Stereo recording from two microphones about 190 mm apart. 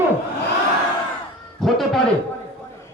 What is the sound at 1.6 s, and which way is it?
Speech, centre (ahead or behind).